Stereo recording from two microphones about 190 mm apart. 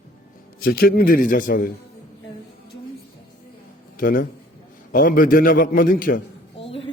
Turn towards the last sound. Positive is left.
turn(degrees=30)  # may be behind; listen again after turning